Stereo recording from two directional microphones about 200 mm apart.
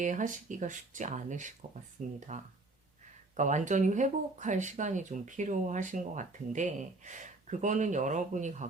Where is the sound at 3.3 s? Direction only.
35° right (ahead or behind).